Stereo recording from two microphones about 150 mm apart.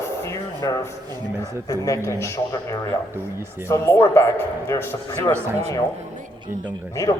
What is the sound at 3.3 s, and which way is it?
Speech, 15° right (ahead or behind).